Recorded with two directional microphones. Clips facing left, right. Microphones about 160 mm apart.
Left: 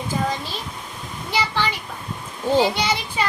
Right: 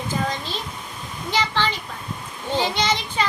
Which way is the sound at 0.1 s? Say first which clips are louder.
Left 2 dB; 10° left (ahead or behind).